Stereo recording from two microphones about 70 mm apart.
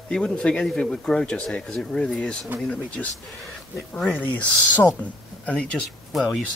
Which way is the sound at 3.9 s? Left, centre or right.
Centre.